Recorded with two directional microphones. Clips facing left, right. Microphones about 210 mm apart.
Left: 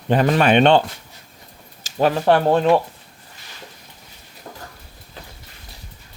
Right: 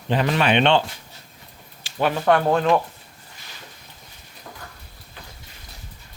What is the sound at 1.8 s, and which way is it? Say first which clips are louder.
Speech: left 4 dB; 40° left (ahead or behind).